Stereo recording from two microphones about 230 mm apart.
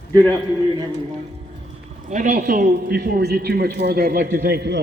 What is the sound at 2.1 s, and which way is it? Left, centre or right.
A man's voice, right.